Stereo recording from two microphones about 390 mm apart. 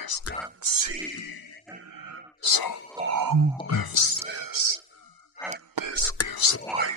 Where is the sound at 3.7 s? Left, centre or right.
Left.